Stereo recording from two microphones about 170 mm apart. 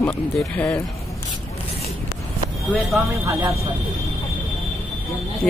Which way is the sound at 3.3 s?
20° right (ahead or behind).